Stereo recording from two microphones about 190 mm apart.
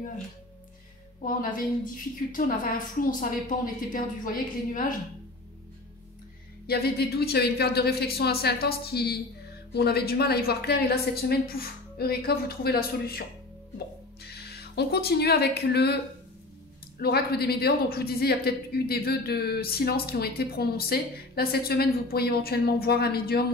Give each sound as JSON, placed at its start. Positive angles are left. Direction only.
{"t": 2.3, "sound": "a woman's voice", "side_deg": 45}
{"t": 6.7, "sound": "a woman's voice", "side_deg": 55}
{"t": 14.2, "sound": "speech", "side_deg": 60}
{"t": 17.0, "sound": "a woman's voice", "side_deg": 55}